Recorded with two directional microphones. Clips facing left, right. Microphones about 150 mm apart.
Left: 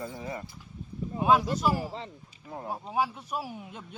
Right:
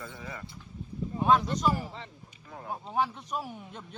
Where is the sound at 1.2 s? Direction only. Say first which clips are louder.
Left 1 dB; 5° left (ahead or behind).